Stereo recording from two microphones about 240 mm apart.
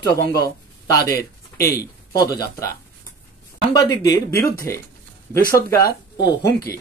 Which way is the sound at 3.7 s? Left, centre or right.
Centre.